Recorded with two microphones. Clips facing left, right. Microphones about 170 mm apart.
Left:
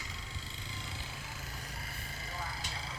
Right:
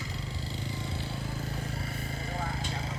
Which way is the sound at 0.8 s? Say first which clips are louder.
Right 10 dB; 35° right (ahead or behind).